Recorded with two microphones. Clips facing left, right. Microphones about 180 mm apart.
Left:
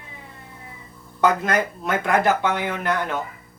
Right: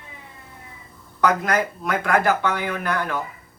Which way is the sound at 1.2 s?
25° left (ahead or behind).